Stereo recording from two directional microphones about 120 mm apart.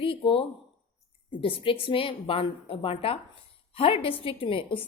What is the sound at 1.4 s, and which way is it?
A woman's voice, 50° left (ahead or behind).